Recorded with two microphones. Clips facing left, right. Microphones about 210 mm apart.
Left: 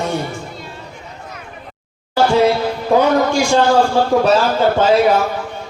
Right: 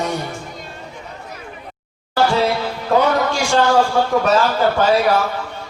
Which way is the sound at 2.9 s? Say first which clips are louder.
Left 2 dB; 15° left (ahead or behind).